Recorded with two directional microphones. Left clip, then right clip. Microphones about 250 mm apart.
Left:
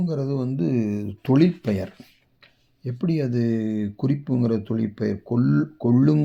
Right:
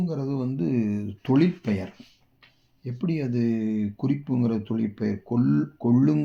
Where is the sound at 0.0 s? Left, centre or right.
Left.